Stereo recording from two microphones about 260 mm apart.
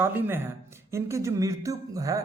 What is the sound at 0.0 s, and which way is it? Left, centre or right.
Speech, centre.